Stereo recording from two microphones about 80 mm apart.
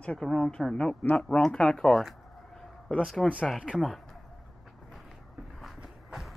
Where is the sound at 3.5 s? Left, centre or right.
Centre.